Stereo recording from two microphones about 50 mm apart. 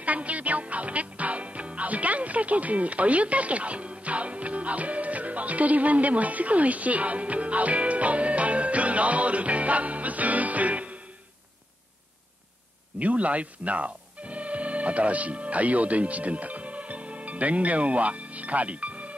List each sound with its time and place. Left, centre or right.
0.0 s speech: right
13.0 s speech: right